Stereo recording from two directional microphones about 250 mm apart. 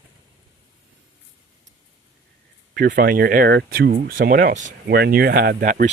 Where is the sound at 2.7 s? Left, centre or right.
Right.